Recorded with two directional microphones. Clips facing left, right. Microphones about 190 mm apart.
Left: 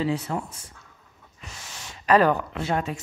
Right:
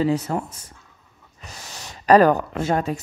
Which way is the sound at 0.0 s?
40° right (ahead or behind).